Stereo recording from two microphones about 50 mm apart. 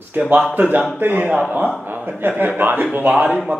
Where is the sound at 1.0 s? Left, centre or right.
Right.